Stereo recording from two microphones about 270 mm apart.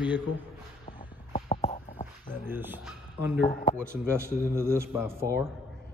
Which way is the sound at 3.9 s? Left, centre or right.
Centre.